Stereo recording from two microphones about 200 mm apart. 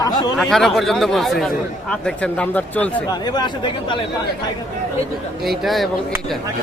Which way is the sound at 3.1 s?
20° left (ahead or behind).